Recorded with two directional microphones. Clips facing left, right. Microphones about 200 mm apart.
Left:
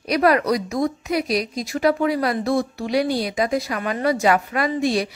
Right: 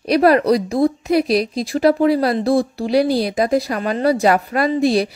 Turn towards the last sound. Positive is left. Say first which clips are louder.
# right 5 dB
turn(degrees=-35)  # may be behind; listen again after turning